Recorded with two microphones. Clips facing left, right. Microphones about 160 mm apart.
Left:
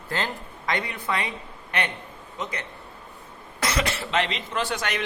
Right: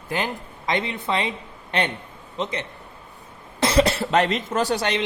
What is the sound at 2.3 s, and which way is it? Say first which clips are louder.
A man's voice: right 5 dB; 25° right (ahead or behind).